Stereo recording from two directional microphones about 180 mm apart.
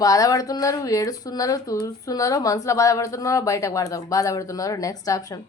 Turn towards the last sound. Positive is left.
turn(degrees=20)  # may be behind; listen again after turning